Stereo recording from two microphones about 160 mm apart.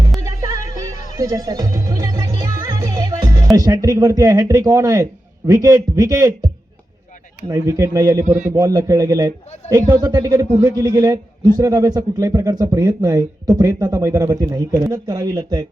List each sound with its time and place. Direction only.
0.2 s music: 20° right (ahead or behind)
3.5 s speech: 20° right (ahead or behind)